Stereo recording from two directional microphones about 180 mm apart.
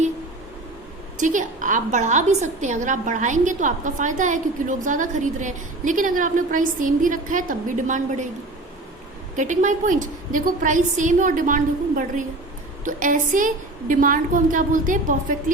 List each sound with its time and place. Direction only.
1.2 s a woman's voice: 45° right (ahead or behind)
9.3 s a woman's voice: 45° right (ahead or behind)